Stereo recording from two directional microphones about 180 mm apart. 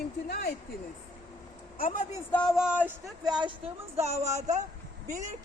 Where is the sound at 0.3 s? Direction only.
55° left (ahead or behind).